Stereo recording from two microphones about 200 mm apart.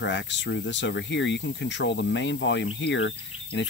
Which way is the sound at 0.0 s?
65° left (ahead or behind).